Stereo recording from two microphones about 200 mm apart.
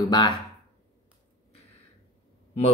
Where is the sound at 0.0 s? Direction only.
20° left (ahead or behind).